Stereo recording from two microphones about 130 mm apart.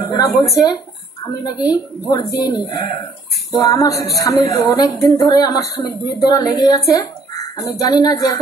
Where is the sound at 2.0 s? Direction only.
30° left (ahead or behind).